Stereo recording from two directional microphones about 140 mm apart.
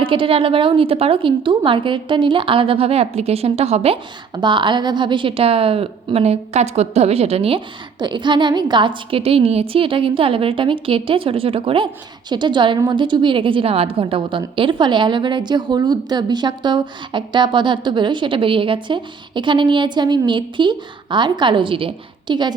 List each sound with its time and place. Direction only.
0.0 s a woman's voice: 40° right (ahead or behind)
4.4 s a woman's voice: 35° right (ahead or behind)